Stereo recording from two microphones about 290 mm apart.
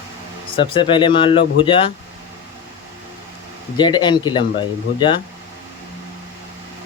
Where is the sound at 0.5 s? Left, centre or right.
Centre.